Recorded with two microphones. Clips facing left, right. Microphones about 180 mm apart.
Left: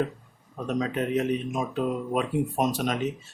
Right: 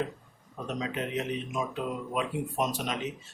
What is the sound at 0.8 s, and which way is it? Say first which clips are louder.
Speech: left 7 dB; 50° left (ahead or behind).